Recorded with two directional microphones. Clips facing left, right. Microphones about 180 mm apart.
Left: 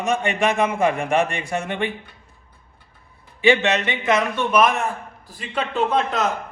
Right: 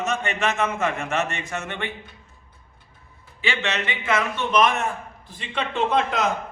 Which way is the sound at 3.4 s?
15° left (ahead or behind).